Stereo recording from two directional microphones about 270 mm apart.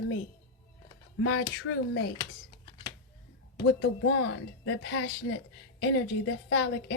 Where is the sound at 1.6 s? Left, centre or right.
Left.